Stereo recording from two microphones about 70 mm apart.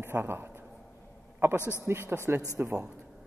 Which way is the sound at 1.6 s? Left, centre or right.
Left.